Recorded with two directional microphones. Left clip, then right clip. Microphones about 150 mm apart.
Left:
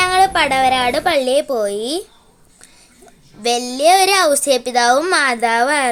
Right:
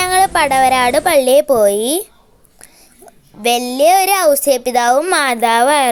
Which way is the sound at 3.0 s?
25° right (ahead or behind).